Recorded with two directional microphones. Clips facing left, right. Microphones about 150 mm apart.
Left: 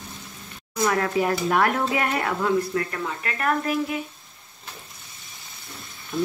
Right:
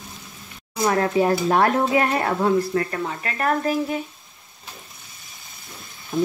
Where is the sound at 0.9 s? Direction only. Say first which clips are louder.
Right 5 dB; 30° right (ahead or behind).